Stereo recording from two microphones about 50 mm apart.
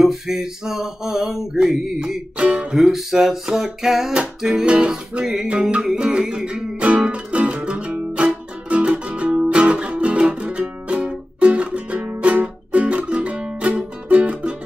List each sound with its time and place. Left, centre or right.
0.0 s speech: centre
5.5 s music: right